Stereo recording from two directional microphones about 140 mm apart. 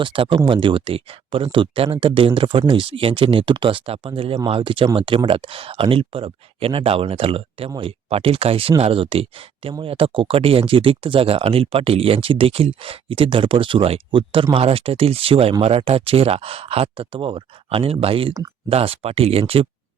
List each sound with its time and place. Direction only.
0.0 s speech: 35° right (ahead or behind)